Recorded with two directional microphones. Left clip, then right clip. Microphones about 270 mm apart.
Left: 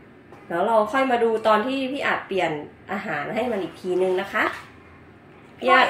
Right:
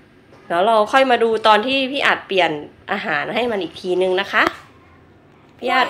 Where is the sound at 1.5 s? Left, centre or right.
Right.